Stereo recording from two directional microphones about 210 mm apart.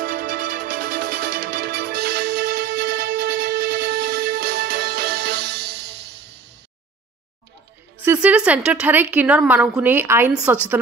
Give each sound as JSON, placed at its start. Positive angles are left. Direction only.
{"t": 0.0, "sound": "music", "side_deg": -40}
{"t": 8.0, "sound": "a woman's voice", "side_deg": -10}